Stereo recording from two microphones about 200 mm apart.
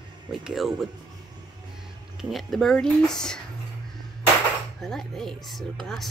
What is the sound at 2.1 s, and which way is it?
Speech, centre (ahead or behind).